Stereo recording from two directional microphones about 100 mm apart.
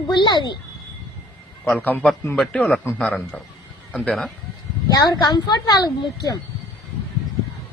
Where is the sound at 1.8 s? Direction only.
15° left (ahead or behind).